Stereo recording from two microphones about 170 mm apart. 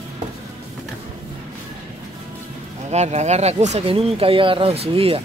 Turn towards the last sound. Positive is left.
turn(degrees=-35)  # may be behind; listen again after turning